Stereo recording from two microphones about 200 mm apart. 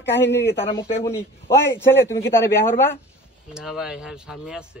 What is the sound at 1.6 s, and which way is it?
A man's voice, 10° left (ahead or behind).